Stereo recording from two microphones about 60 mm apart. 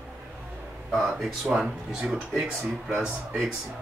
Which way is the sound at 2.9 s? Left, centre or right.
Right.